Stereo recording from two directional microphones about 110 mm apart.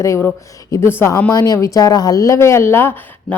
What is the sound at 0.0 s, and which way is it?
A woman's voice, 25° left (ahead or behind).